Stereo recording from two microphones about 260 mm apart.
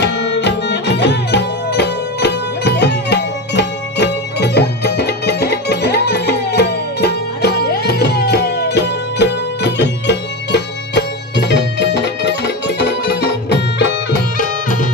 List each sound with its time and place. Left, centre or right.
0.0 s music: left